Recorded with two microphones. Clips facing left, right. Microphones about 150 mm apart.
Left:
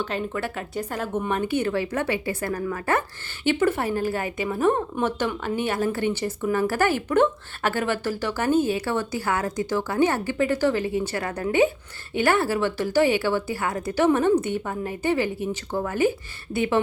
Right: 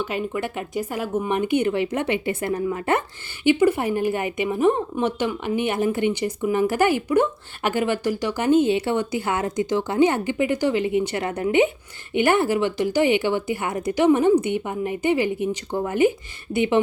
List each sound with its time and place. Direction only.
0.0 s a woman's voice: 10° right (ahead or behind)